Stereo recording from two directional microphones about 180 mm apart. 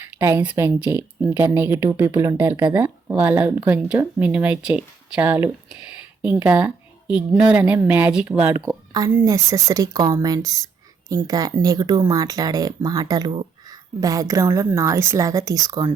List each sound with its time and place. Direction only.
0.2 s speech: 15° right (ahead or behind)